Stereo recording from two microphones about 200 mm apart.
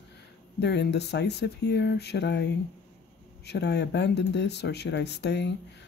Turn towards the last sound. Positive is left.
turn(degrees=60)  # may be behind; listen again after turning